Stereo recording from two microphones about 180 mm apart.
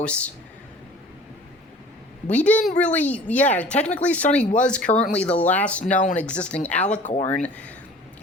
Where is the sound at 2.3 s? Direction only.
10° left (ahead or behind).